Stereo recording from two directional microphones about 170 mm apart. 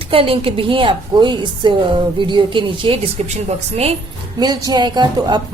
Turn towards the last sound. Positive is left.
turn(degrees=-25)  # may be behind; listen again after turning